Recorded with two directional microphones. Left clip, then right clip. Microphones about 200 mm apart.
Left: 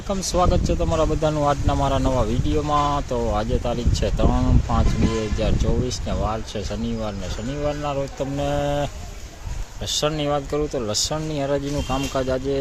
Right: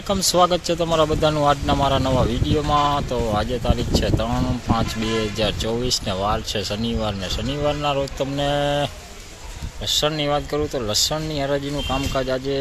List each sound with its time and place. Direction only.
0.1 s speech: centre (ahead or behind)